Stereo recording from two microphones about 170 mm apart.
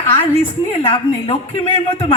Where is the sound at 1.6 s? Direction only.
35° left (ahead or behind).